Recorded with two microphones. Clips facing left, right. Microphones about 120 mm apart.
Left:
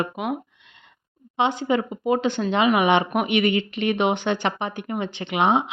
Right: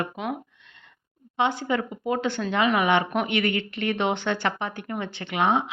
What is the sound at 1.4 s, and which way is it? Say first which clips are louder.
Speech: left 3 dB; 20° left (ahead or behind).